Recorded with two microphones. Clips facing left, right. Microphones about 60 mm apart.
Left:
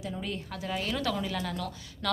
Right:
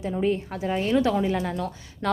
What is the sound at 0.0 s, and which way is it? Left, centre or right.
A woman's voice, right.